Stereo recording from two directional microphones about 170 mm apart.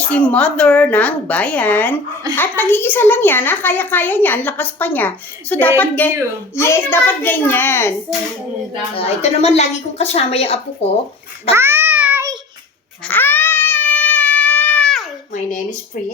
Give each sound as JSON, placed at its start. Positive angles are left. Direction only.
{"t": 0.0, "sound": "a woman's voice", "side_deg": 10}
{"t": 9.0, "sound": "a woman's voice", "side_deg": 40}
{"t": 11.5, "sound": "babbling", "side_deg": -15}
{"t": 13.1, "sound": "baby cry", "side_deg": 10}